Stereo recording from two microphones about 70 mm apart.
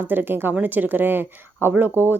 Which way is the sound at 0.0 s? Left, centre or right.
Right.